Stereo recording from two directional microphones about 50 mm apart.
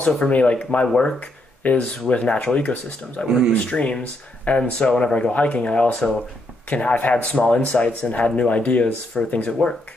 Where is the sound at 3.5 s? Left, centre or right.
Left.